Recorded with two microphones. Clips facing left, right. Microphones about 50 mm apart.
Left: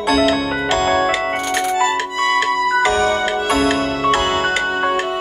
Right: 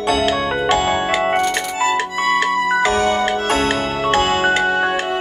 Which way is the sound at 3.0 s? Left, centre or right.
Right.